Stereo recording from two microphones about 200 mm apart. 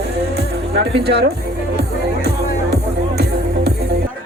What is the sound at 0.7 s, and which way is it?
Speech, 55° right (ahead or behind).